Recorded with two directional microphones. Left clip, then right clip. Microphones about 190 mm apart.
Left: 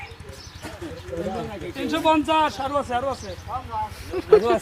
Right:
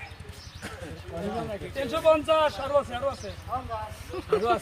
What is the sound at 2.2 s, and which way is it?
Speech, 45° left (ahead or behind).